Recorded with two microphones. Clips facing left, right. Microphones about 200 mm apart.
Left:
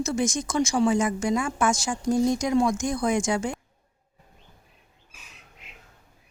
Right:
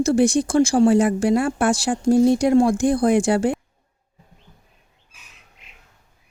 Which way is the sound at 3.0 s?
60° right (ahead or behind).